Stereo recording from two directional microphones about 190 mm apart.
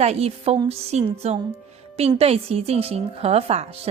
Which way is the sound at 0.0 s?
30° right (ahead or behind).